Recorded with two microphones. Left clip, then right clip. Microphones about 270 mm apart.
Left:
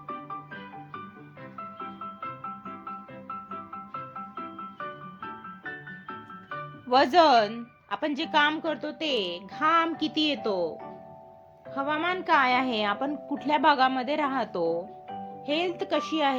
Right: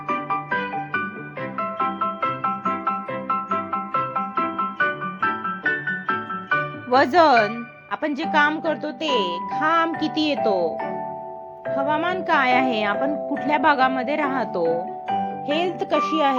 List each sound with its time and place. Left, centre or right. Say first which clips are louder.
0.1 s music: right 14 dB; right
6.9 s a woman's voice: right 4 dB; centre